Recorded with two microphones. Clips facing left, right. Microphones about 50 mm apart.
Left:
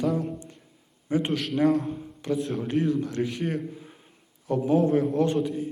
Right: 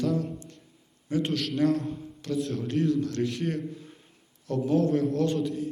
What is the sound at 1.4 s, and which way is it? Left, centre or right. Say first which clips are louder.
A man's voice: left 2 dB; centre.